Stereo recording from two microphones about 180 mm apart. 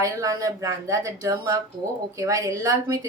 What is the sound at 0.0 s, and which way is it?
A woman's voice, 20° right (ahead or behind).